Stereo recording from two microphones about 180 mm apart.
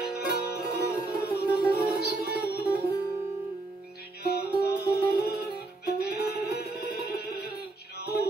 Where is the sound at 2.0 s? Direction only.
60° left (ahead or behind).